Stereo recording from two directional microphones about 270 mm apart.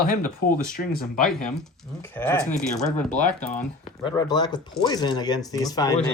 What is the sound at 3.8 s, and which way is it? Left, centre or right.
Speech, centre.